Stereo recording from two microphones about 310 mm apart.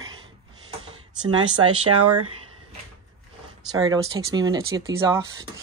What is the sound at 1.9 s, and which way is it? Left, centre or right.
Speech, right.